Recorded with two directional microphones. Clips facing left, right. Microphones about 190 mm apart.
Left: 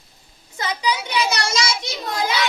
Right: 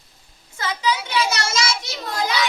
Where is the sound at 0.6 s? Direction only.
20° left (ahead or behind).